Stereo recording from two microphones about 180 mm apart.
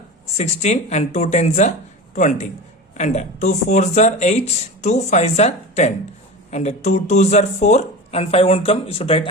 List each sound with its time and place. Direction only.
0.3 s a man's voice: 40° left (ahead or behind)